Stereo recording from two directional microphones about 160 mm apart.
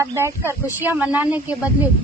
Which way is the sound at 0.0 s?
20° right (ahead or behind).